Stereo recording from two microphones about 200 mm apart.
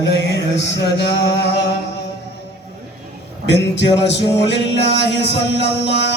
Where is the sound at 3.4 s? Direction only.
60° left (ahead or behind).